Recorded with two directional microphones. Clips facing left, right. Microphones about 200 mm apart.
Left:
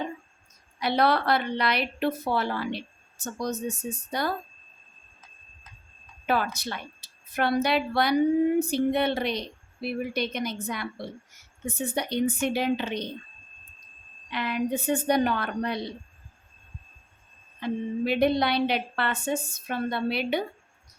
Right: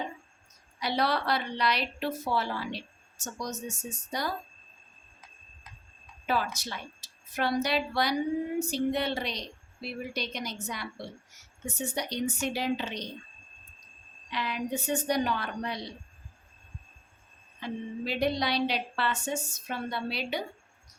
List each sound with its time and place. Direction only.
0.8 s speech: 60° left (ahead or behind)
6.2 s a woman's voice: 60° left (ahead or behind)
14.3 s speech: 55° left (ahead or behind)
17.6 s speech: 55° left (ahead or behind)